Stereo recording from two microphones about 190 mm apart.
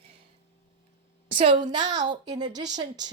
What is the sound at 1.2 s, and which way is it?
A woman's voice, 25° right (ahead or behind).